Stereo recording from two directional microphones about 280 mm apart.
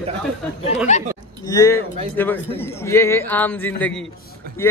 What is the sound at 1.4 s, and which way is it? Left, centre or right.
Speech, centre.